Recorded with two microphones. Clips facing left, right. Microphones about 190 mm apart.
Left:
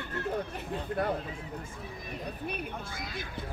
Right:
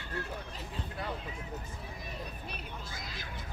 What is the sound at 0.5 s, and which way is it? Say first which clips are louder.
Speech: left 8 dB; 55° left (ahead or behind).